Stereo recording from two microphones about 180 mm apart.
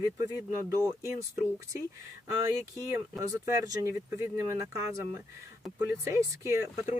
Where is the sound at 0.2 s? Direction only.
15° right (ahead or behind).